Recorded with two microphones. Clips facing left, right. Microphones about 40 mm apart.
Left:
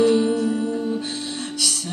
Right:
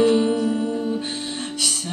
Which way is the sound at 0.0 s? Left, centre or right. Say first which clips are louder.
Even; right.